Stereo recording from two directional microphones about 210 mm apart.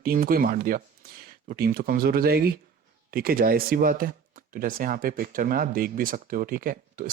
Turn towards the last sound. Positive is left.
turn(degrees=-40)  # may be behind; listen again after turning